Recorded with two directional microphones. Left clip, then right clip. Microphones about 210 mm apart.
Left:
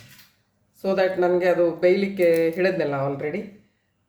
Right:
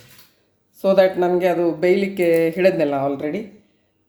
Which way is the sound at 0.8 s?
35° right (ahead or behind).